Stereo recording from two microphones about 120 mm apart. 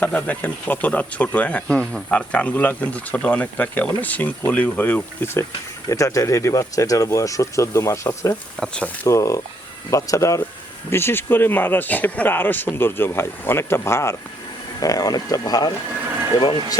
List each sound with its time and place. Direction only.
0.0 s speech: 15° left (ahead or behind)
8.5 s speech: 5° left (ahead or behind)
9.0 s speech: 25° left (ahead or behind)